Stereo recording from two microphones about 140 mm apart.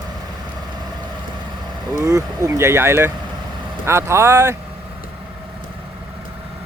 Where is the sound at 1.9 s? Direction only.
20° right (ahead or behind).